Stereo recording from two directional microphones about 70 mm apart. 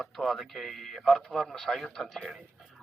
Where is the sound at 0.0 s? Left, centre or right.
Centre.